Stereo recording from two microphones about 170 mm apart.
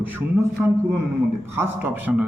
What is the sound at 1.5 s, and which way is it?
Speech, 15° right (ahead or behind).